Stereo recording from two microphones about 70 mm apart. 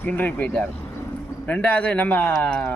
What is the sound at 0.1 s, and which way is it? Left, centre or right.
A man's voice, left.